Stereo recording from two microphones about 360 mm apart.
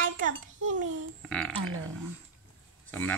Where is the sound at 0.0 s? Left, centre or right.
Right.